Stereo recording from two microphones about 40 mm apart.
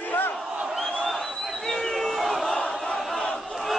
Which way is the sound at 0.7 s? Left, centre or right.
Centre.